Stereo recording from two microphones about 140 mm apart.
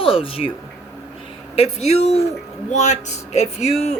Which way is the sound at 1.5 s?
50° left (ahead or behind).